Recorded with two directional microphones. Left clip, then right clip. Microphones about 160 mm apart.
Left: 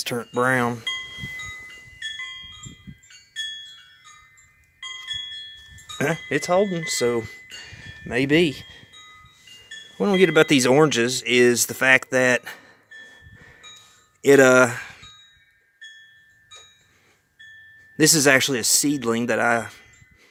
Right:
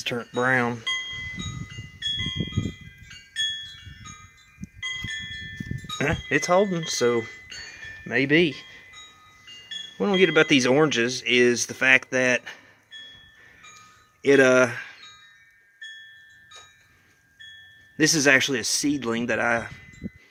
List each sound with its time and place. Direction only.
0.0 s speech: 30° left (ahead or behind)
6.0 s speech: 20° left (ahead or behind)
6.4 s speech: 5° left (ahead or behind)
7.6 s wind chime: 30° left (ahead or behind)
10.0 s speech: 30° left (ahead or behind)
14.2 s speech: 40° left (ahead or behind)
17.9 s speech: 35° left (ahead or behind)